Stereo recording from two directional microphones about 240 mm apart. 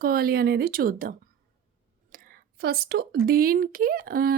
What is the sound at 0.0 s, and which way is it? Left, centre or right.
Speech, right.